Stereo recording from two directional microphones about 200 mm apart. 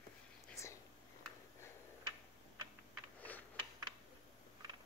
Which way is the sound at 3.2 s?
10° left (ahead or behind).